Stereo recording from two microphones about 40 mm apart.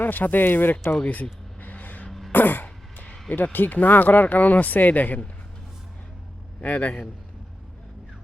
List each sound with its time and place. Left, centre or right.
0.0 s speech: left
1.2 s vehicle: left
2.3 s throat clearing: left
3.3 s speech: left
6.6 s a man's voice: left